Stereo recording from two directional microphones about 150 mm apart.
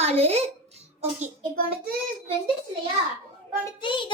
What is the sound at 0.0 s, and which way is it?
Speech, 45° right (ahead or behind).